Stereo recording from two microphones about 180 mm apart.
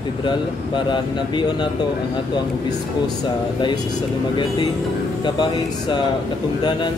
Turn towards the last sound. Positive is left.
turn(degrees=25)  # may be behind; listen again after turning